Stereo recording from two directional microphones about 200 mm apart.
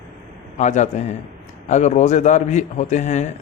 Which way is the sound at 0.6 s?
35° left (ahead or behind).